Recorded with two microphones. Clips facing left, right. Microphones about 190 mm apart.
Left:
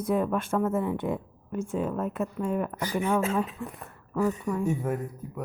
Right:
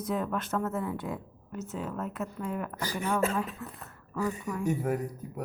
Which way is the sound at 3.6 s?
15° left (ahead or behind).